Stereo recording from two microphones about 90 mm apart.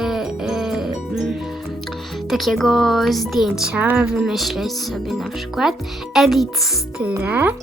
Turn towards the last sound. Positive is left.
turn(degrees=-20)  # may be behind; listen again after turning